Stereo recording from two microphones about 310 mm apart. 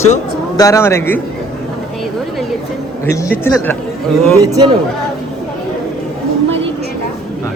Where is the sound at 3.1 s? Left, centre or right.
Centre.